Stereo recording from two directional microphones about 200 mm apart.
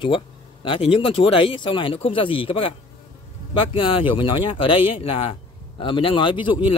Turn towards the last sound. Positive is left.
turn(degrees=25)  # may be behind; listen again after turning